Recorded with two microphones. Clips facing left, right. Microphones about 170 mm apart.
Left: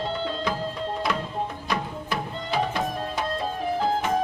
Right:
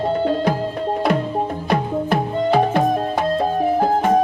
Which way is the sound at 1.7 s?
55° right (ahead or behind).